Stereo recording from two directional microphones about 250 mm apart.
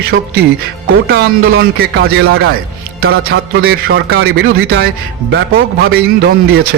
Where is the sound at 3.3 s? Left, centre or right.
Right.